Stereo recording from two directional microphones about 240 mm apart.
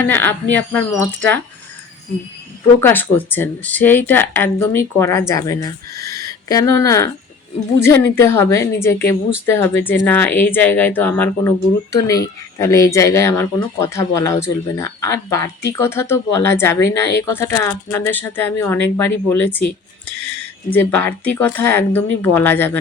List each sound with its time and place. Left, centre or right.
0.0 s speech: centre
2.8 s speech: centre
20.1 s music: right
20.9 s speech: centre